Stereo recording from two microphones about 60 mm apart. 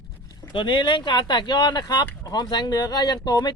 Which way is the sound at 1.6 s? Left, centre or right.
Left.